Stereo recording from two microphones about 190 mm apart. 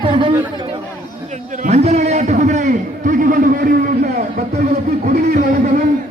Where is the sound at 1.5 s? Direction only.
35° right (ahead or behind).